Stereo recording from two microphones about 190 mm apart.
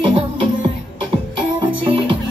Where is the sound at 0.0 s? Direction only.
25° right (ahead or behind).